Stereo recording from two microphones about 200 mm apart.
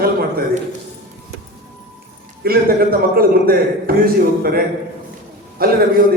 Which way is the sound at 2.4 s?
50° right (ahead or behind).